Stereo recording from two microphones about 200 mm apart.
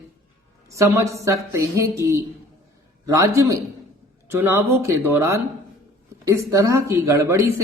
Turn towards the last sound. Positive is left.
turn(degrees=-15)  # may be behind; listen again after turning